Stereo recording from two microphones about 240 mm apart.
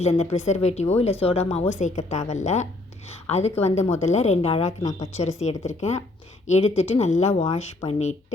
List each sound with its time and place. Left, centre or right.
0.0 s speech: left